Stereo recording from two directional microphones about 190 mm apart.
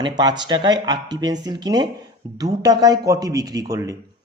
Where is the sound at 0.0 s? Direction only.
25° right (ahead or behind).